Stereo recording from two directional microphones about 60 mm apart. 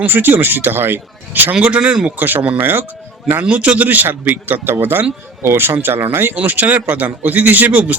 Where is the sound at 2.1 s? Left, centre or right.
Right.